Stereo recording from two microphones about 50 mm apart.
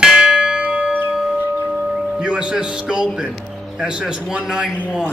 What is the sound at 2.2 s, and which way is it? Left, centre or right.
A man's voice, centre.